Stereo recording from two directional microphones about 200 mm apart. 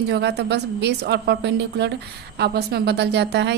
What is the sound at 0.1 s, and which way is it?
A woman's voice, 55° right (ahead or behind).